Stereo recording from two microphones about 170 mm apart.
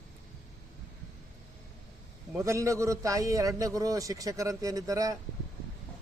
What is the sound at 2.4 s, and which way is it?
A man's voice, 15° right (ahead or behind).